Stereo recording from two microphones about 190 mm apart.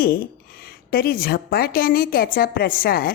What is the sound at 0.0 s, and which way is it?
A woman's voice, 50° left (ahead or behind).